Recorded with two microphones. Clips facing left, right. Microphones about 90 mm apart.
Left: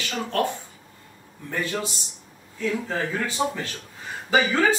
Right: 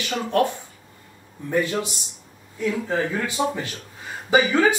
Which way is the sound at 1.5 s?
15° right (ahead or behind).